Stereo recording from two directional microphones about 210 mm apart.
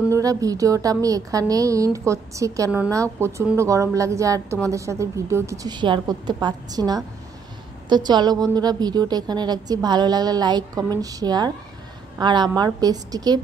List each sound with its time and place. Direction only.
0.1 s a woman's voice: 15° right (ahead or behind)